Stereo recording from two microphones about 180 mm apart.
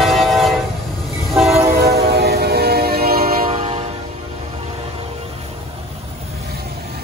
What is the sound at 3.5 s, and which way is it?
Train, 35° right (ahead or behind).